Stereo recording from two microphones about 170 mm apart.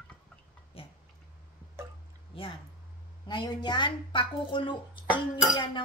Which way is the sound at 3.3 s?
25° left (ahead or behind).